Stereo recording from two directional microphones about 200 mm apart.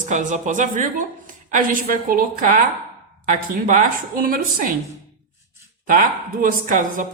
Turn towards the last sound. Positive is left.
turn(degrees=-40)  # may be behind; listen again after turning